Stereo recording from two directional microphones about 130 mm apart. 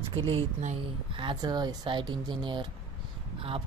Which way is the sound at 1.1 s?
35° right (ahead or behind).